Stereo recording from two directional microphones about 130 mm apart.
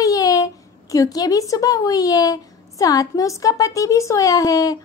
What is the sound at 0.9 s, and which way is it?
A woman's voice, 30° left (ahead or behind).